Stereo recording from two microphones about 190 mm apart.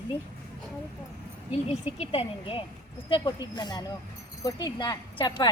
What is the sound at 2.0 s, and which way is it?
Speech, 30° left (ahead or behind).